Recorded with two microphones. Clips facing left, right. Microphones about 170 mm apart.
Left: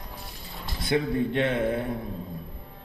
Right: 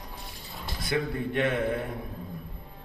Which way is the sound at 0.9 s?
25° left (ahead or behind).